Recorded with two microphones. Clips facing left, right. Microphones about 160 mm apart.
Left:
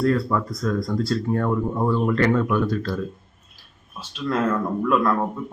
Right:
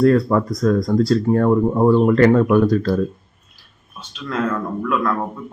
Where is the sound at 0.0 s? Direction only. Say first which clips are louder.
Right 7 dB; 45° right (ahead or behind).